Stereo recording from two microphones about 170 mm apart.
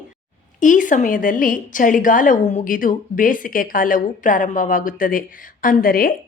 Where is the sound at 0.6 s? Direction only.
50° left (ahead or behind).